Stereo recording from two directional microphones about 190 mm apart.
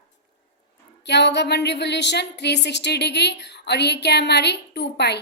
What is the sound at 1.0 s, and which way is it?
A woman's voice, 65° left (ahead or behind).